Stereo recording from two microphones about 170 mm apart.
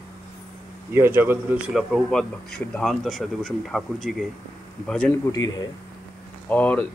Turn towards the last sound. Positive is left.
turn(degrees=10)  # may be behind; listen again after turning